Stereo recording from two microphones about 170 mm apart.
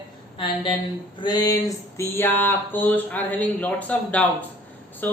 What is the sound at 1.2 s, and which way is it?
Speech, 25° left (ahead or behind).